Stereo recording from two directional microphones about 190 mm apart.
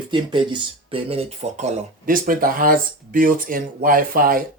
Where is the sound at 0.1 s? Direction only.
25° right (ahead or behind).